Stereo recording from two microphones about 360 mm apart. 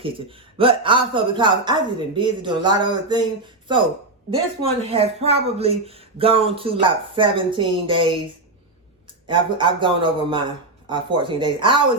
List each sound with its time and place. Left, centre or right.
0.0 s speech: centre
4.6 s speech: centre
9.2 s speech: centre